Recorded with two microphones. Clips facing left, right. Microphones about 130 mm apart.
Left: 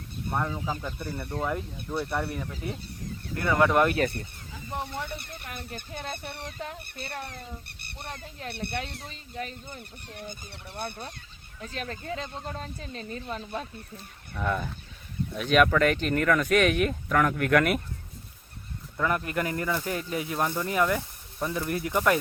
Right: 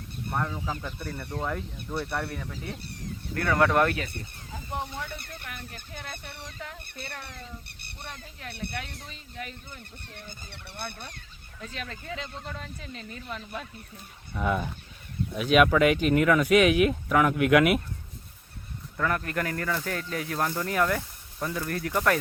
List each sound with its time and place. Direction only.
0.3 s speech: 5° left (ahead or behind)
4.9 s speech: 10° left (ahead or behind)
5.9 s speech: 30° left (ahead or behind)
14.3 s speech: 5° right (ahead or behind)
18.9 s speech: 10° left (ahead or behind)